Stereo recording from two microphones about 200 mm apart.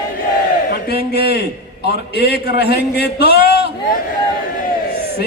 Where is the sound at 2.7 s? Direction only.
55° left (ahead or behind).